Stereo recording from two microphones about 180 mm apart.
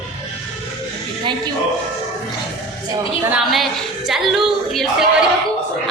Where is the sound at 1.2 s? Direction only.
25° right (ahead or behind).